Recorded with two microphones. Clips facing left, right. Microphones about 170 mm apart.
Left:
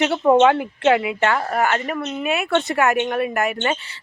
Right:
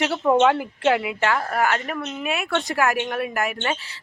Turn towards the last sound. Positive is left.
turn(degrees=0)  # may be behind; listen again after turning